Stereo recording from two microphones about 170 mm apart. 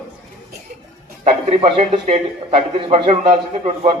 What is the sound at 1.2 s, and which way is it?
A man's voice, 40° right (ahead or behind).